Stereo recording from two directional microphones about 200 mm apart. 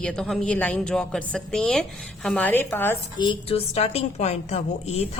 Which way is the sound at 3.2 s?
25° left (ahead or behind).